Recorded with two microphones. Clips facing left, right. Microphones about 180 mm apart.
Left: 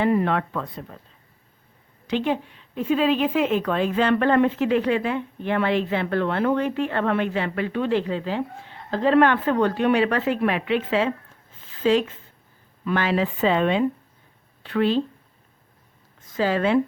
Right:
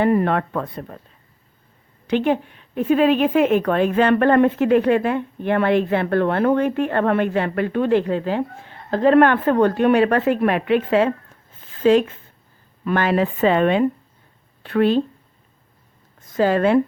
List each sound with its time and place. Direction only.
0.0 s a woman's voice: 50° right (ahead or behind)
2.0 s a woman's voice: 55° right (ahead or behind)
16.3 s a woman's voice: 50° right (ahead or behind)